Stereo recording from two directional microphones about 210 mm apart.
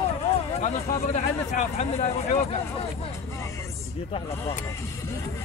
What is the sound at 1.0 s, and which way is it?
Speech, 30° left (ahead or behind).